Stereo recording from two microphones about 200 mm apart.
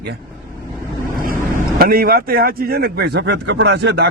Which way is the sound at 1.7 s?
50° right (ahead or behind).